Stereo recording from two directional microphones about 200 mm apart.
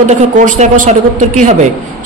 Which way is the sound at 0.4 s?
40° right (ahead or behind).